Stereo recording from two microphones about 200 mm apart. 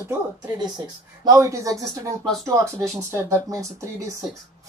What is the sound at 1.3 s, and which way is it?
A woman's voice, 15° right (ahead or behind).